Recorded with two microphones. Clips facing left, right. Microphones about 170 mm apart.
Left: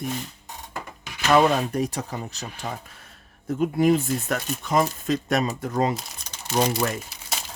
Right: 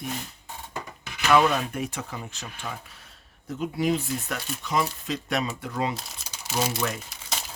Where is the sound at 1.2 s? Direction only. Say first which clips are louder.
Left 2 dB; 40° left (ahead or behind).